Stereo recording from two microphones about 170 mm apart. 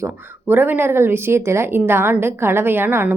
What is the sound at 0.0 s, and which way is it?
Speech, 15° right (ahead or behind).